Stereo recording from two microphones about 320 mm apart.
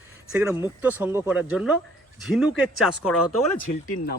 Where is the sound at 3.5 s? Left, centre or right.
Left.